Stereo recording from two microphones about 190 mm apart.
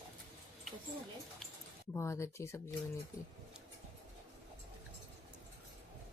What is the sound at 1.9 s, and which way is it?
Speech, 15° left (ahead or behind).